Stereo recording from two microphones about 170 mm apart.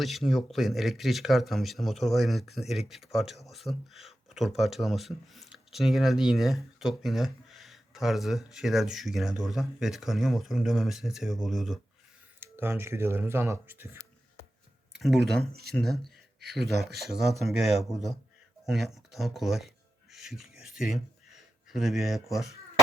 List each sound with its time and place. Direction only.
0.0 s speech: centre (ahead or behind)
12.4 s speech: 15° right (ahead or behind)
14.9 s speech: centre (ahead or behind)